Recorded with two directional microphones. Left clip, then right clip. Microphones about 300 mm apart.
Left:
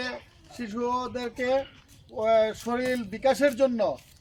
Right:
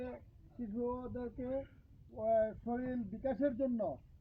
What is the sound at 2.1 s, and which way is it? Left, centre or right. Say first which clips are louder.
Speech: left 11 dB; left.